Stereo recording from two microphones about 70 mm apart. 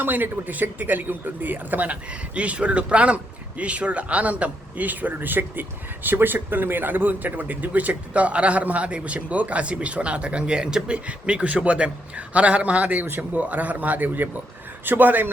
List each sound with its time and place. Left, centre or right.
0.0 s a man's voice: right